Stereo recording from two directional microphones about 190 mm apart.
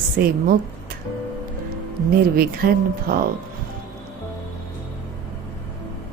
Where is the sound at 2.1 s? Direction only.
50° right (ahead or behind).